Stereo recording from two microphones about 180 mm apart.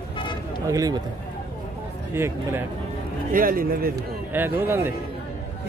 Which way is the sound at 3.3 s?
50° right (ahead or behind).